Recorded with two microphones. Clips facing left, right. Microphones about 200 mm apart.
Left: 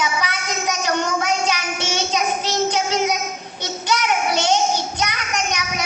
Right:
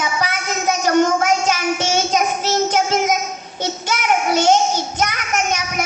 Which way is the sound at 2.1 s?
45° right (ahead or behind).